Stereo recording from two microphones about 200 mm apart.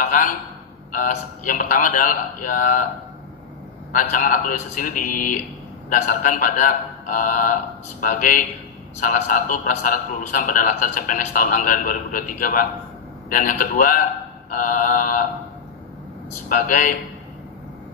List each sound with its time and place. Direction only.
0.0 s a sound: 45° left (ahead or behind)
0.9 s a man's voice: 40° left (ahead or behind)
3.9 s a man's voice: 40° left (ahead or behind)
16.4 s a man's voice: 40° left (ahead or behind)